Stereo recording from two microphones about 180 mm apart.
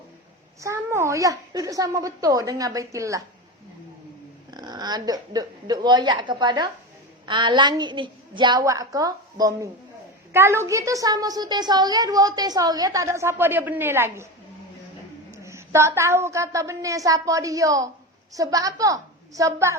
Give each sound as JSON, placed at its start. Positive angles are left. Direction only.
{"t": 0.6, "sound": "a child's voice", "side_deg": -15}
{"t": 4.5, "sound": "a woman's voice", "side_deg": -25}
{"t": 15.3, "sound": "a child's voice", "side_deg": -15}